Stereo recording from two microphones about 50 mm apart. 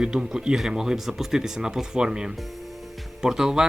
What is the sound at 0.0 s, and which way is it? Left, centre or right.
Speech, centre.